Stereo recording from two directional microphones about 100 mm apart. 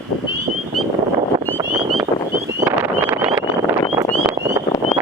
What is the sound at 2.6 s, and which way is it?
Wind noise, 20° right (ahead or behind).